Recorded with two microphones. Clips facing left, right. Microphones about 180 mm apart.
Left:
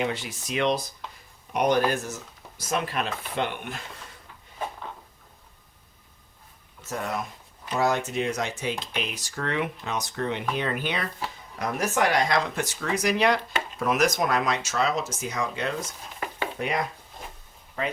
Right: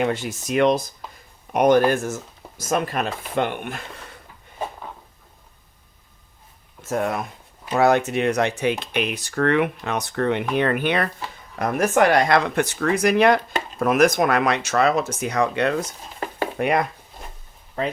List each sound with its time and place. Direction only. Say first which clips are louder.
0.0 s speech: right 6 dB; 45° right (ahead or behind)
6.8 s speech: right 7 dB; 55° right (ahead or behind)
16.2 s a sound: right 4 dB; 35° right (ahead or behind)
16.6 s speech: right 8 dB; 60° right (ahead or behind)